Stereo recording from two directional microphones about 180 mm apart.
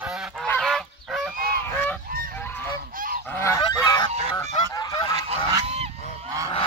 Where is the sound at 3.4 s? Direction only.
20° left (ahead or behind).